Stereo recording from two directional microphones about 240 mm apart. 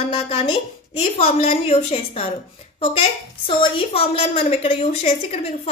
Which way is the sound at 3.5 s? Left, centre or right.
Left.